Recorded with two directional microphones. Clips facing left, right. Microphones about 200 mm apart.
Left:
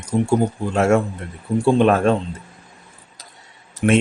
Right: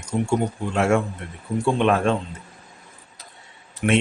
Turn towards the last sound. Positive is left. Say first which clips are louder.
# left 4 dB
turn(degrees=30)  # may be behind; listen again after turning